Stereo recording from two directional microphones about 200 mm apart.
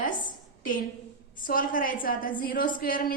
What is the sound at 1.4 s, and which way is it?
A woman's voice, 45° left (ahead or behind).